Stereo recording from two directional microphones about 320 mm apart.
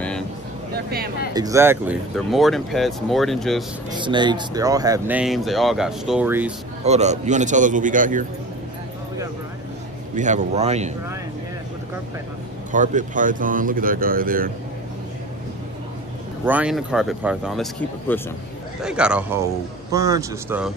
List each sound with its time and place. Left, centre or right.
0.7 s speech: right
1.3 s speech: centre
3.9 s speech: centre
6.8 s speech: right
10.1 s speech: right
12.7 s speech: right
16.4 s speech: centre